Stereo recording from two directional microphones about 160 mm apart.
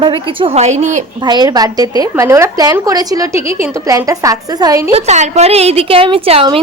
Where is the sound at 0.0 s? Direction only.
35° right (ahead or behind).